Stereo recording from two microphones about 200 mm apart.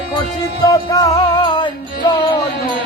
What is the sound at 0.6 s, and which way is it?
Music, 20° left (ahead or behind).